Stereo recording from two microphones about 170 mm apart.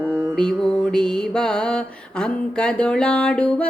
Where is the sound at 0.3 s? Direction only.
5° left (ahead or behind).